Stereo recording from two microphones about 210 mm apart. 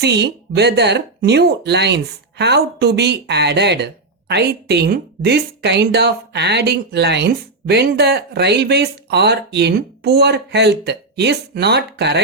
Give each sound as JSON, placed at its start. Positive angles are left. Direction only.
{"t": 0.0, "sound": "a woman's voice", "side_deg": -50}